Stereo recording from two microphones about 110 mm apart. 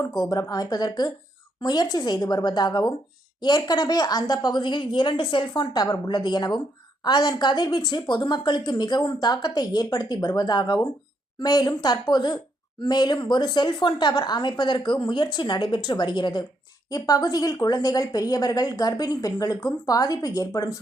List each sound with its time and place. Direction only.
0.0 s a woman's voice: 35° left (ahead or behind)